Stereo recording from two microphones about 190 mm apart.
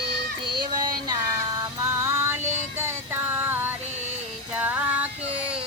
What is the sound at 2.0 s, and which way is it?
Music, 15° right (ahead or behind).